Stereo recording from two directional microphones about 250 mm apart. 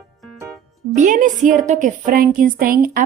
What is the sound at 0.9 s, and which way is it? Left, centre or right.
A woman's voice, right.